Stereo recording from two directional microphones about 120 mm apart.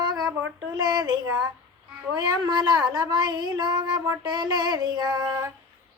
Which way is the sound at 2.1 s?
35° right (ahead or behind).